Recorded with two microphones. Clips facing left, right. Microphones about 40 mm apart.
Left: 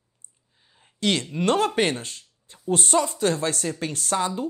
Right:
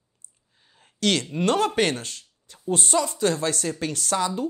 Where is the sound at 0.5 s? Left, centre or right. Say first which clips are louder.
Right 2 dB; centre.